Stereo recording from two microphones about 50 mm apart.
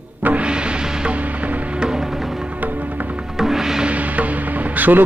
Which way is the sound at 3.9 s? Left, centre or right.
Right.